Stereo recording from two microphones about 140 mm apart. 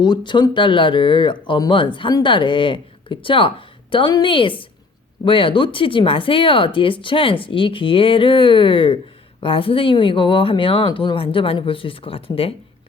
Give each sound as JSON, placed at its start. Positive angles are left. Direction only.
{"t": 0.0, "sound": "speech", "side_deg": 30}